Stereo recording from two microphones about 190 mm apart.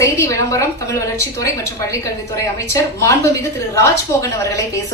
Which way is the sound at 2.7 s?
15° left (ahead or behind).